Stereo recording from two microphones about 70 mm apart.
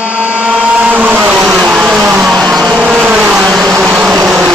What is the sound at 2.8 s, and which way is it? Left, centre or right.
Vehicle, right.